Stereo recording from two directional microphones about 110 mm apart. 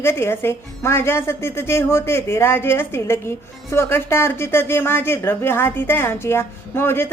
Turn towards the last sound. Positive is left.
turn(degrees=20)  # may be behind; listen again after turning